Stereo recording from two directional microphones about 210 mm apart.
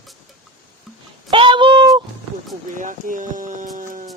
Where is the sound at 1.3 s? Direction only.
25° right (ahead or behind).